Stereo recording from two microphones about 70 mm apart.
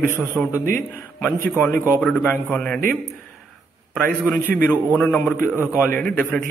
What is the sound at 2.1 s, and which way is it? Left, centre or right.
Speech, centre.